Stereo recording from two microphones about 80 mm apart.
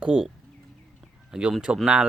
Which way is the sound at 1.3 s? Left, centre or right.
Centre.